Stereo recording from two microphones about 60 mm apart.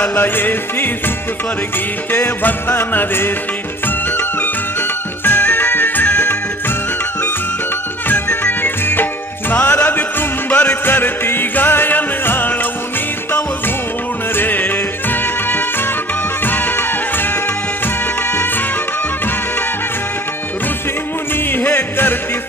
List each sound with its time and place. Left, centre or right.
0.1 s music: left
2.1 s music: left
5.2 s music: left
8.1 s music: left
14.3 s music: left
21.5 s music: left